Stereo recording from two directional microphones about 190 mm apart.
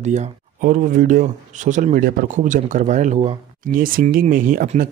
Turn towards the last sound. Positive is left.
turn(degrees=-45)  # may be behind; listen again after turning